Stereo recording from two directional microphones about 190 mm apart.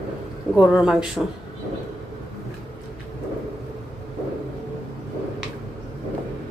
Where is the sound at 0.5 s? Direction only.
5° right (ahead or behind).